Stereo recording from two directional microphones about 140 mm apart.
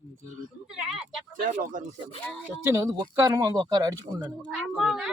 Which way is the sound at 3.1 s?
25° right (ahead or behind).